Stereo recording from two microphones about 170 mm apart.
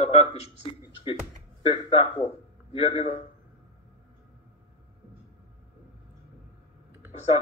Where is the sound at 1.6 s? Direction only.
30° left (ahead or behind).